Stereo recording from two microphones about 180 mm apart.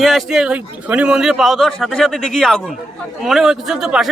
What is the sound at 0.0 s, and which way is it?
A man's voice, centre (ahead or behind).